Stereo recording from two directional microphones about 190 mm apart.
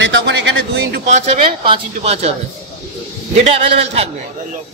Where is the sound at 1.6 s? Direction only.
30° right (ahead or behind).